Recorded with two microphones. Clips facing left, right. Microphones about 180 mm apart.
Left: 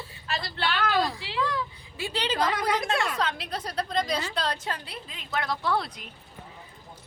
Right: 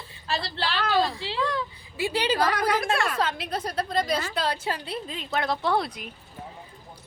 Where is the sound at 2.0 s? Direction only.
10° right (ahead or behind).